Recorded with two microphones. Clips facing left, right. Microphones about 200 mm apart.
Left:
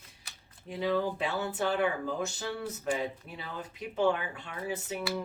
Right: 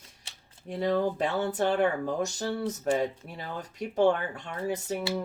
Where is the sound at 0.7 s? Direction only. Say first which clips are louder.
Right 3 dB; 45° right (ahead or behind).